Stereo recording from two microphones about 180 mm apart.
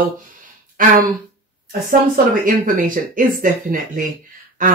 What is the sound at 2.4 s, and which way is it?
Speech, 50° right (ahead or behind).